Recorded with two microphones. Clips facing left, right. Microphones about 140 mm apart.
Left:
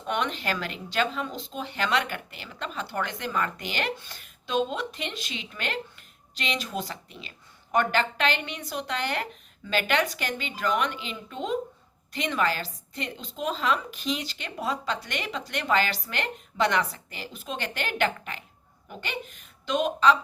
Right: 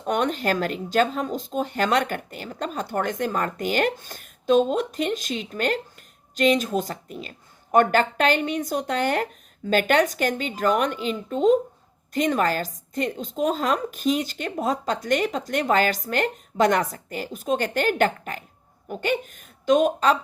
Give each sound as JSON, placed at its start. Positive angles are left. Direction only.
{"t": 0.0, "sound": "speech", "side_deg": -45}